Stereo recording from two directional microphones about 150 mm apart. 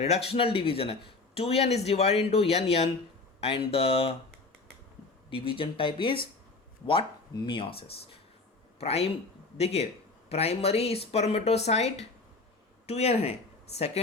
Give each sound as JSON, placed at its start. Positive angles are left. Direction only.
{"t": 0.0, "sound": "speech", "side_deg": 45}
{"t": 5.3, "sound": "speech", "side_deg": 35}